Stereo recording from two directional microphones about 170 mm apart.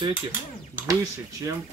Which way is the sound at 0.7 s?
20° right (ahead or behind).